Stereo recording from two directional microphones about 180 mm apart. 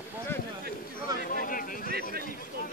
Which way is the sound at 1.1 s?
50° left (ahead or behind).